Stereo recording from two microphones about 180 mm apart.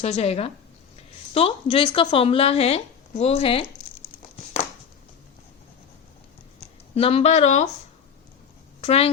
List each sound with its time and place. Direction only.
0.0 s speech: 35° left (ahead or behind)
6.9 s speech: 35° left (ahead or behind)
8.8 s a woman's voice: 35° left (ahead or behind)